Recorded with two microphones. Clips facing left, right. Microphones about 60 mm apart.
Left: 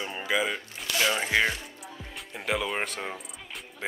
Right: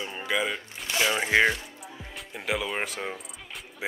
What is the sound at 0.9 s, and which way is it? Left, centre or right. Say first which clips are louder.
Speech: right 2 dB; centre.